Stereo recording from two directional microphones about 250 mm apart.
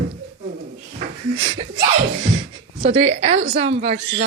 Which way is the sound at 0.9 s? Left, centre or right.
Right.